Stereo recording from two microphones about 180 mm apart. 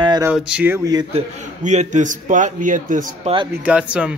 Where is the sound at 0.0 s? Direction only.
25° right (ahead or behind).